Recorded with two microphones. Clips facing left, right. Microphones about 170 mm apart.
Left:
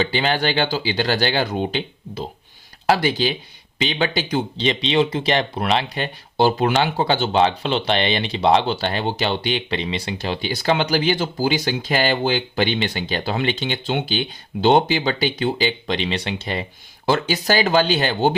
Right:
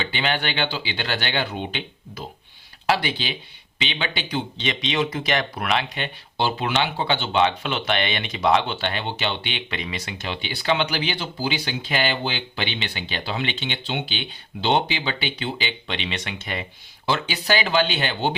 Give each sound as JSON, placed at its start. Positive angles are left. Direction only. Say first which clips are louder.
{"t": 0.0, "sound": "speech", "louder": "left 5 dB", "side_deg": 35}
{"t": 17.1, "sound": "speech", "louder": "left 4 dB", "side_deg": 45}